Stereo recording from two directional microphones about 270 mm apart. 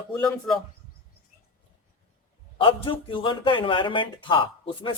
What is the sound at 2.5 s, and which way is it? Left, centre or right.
A man's voice, centre.